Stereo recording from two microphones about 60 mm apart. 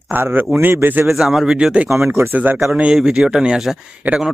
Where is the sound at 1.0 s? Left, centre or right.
Centre.